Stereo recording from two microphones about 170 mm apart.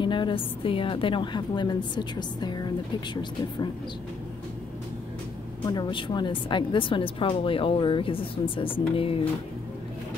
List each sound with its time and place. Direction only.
0.0 s a woman's voice: 30° left (ahead or behind)
5.7 s a woman's voice: 25° left (ahead or behind)